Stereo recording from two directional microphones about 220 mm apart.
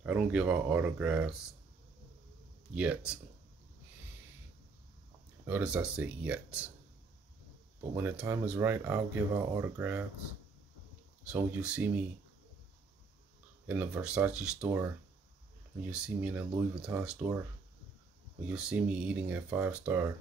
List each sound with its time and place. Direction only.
0.0 s speech: 5° right (ahead or behind)
2.7 s speech: 5° right (ahead or behind)
5.5 s speech: 5° right (ahead or behind)
7.9 s speech: 10° right (ahead or behind)
11.2 s speech: 5° right (ahead or behind)
13.7 s speech: 5° right (ahead or behind)
18.5 s speech: 5° right (ahead or behind)